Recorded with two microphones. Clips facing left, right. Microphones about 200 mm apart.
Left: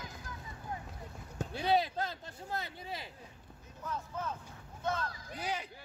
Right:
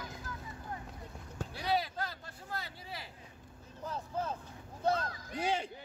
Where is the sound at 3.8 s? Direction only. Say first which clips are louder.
Right 2 dB; 35° right (ahead or behind).